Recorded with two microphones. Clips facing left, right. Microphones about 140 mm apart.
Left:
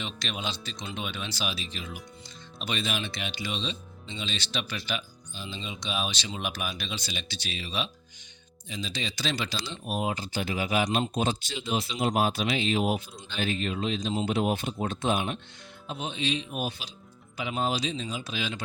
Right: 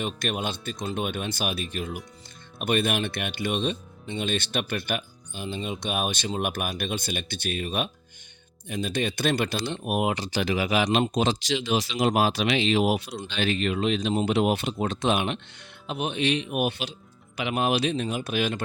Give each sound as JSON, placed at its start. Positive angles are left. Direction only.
{"t": 0.0, "sound": "speech", "side_deg": -50}
{"t": 15.9, "sound": "speech", "side_deg": -65}